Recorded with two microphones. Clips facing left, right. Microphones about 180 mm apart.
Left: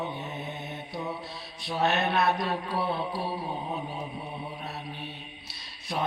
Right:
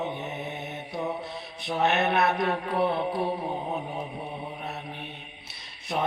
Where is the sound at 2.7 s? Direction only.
20° right (ahead or behind).